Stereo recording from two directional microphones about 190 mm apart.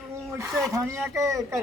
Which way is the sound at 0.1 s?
15° right (ahead or behind).